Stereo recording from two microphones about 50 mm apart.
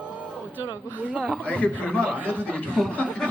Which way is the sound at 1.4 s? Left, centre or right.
Left.